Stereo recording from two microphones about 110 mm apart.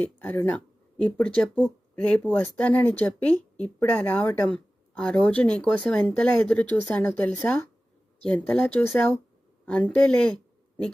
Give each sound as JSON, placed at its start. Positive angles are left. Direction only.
{"t": 0.0, "sound": "speech", "side_deg": 20}